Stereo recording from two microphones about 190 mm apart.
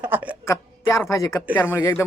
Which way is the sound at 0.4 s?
15° left (ahead or behind).